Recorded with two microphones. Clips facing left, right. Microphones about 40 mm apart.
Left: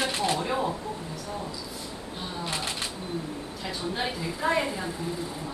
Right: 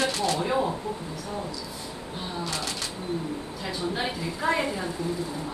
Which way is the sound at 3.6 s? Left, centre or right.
Centre.